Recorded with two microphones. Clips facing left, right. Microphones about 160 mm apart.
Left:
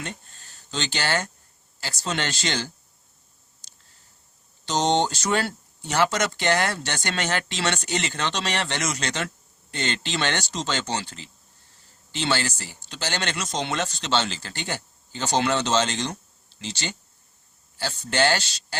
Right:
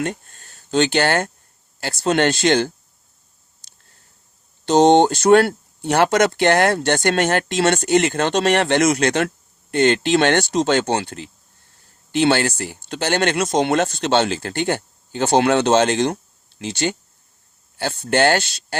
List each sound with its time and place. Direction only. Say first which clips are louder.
0.0 s speech: right 11 dB; 50° right (ahead or behind)
4.6 s speech: right 10 dB; 55° right (ahead or behind)